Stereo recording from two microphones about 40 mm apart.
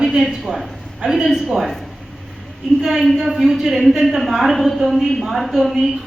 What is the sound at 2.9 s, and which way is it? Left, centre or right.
A woman's voice, centre.